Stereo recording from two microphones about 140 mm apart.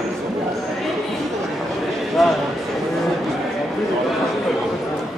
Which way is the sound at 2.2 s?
Centre (ahead or behind).